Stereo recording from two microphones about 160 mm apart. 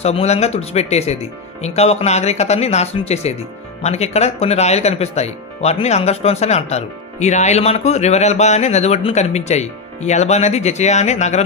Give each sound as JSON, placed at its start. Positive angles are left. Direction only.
{"t": 0.0, "sound": "speech", "side_deg": 40}